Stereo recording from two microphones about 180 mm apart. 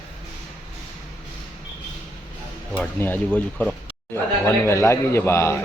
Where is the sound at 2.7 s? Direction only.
10° left (ahead or behind).